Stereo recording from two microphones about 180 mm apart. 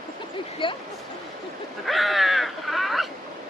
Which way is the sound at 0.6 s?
30° left (ahead or behind).